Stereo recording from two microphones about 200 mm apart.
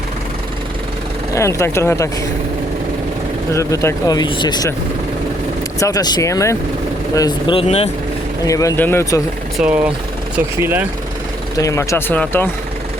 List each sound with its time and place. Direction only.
1.3 s speech: 15° left (ahead or behind)
3.5 s speech: 15° left (ahead or behind)
5.8 s speech: 20° left (ahead or behind)
8.4 s speech: 15° left (ahead or behind)
9.6 s speech: 5° right (ahead or behind)
11.5 s speech: 15° left (ahead or behind)